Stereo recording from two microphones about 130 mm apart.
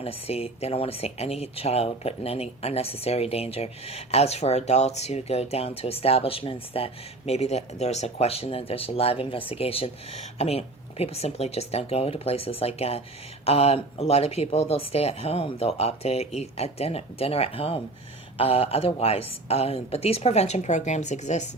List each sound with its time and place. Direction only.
0.0 s speech: 50° left (ahead or behind)